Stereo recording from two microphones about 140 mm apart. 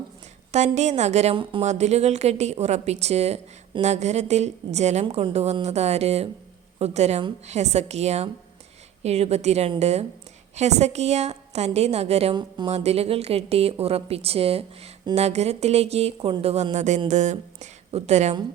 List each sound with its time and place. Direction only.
0.5 s a woman's voice: 55° right (ahead or behind)
12.3 s speech: 35° right (ahead or behind)
12.7 s speech: 50° right (ahead or behind)